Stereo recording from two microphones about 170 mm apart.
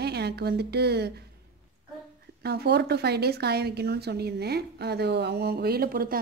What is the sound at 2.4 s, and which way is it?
Speech, 70° right (ahead or behind).